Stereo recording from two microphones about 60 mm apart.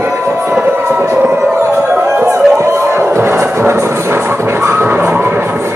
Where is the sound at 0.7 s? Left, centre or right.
Right.